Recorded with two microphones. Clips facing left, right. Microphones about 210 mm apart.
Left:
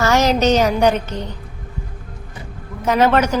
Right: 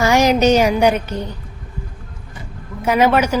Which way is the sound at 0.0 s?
15° right (ahead or behind).